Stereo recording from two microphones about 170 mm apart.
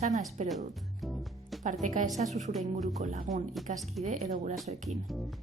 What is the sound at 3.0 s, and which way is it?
A woman's voice, 45° right (ahead or behind).